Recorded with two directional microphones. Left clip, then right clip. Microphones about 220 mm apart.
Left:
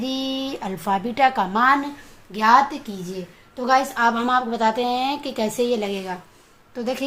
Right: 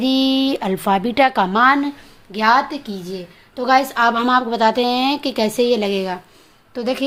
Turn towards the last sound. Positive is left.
turn(degrees=-45)  # may be behind; listen again after turning